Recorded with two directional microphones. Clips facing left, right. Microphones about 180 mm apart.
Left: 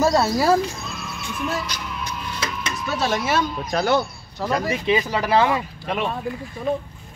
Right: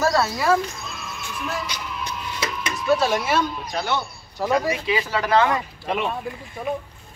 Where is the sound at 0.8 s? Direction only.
Centre (ahead or behind).